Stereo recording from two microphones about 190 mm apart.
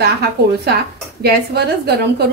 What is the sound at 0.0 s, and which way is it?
A woman's voice, 55° right (ahead or behind).